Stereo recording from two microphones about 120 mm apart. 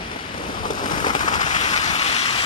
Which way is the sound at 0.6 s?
90° left.